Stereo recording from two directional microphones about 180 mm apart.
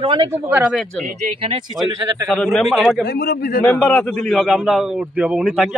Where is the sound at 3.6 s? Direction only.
5° left (ahead or behind).